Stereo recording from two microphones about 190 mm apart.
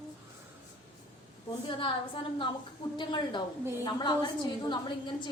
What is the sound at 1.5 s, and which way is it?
A woman's voice, 25° left (ahead or behind).